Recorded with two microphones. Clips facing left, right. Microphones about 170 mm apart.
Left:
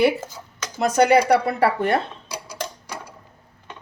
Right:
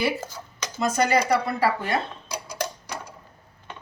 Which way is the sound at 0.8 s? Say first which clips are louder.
Left 6 dB; 65° left (ahead or behind).